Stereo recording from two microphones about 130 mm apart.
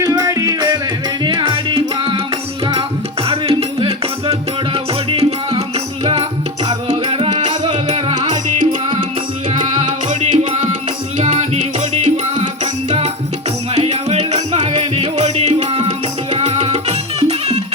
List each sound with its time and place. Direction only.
0.0 s music: 25° right (ahead or behind)
3.2 s music: 50° right (ahead or behind)
8.2 s music: 70° right (ahead or behind)
13.7 s music: 55° right (ahead or behind)